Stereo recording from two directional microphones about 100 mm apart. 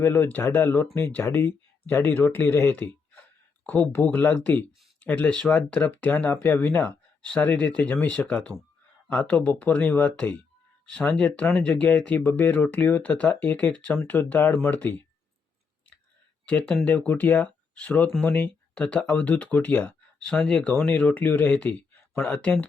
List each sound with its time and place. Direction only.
0.0 s speech: 20° left (ahead or behind)
16.5 s speech: 10° left (ahead or behind)